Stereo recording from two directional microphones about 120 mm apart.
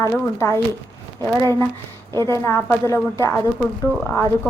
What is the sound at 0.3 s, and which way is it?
A woman's voice, 25° left (ahead or behind).